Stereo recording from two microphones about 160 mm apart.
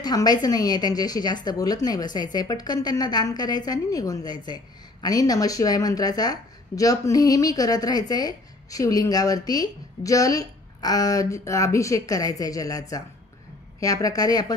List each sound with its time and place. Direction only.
0.0 s a woman's voice: 25° left (ahead or behind)